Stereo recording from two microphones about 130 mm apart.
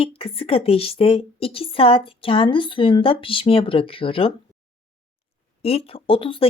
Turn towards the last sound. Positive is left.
turn(degrees=45)  # may be behind; listen again after turning